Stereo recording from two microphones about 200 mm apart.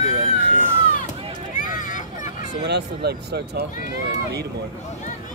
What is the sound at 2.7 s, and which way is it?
Speech, 55° right (ahead or behind).